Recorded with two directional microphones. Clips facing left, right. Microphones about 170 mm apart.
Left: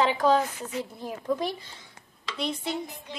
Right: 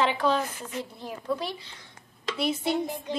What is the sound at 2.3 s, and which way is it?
Speech, 5° right (ahead or behind).